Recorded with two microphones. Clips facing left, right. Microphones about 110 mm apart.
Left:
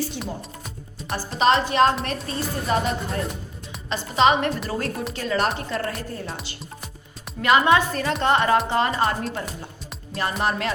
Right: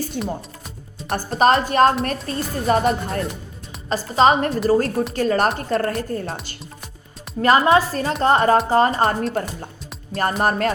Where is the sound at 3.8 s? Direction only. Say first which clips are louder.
Right 3 dB; 40° right (ahead or behind).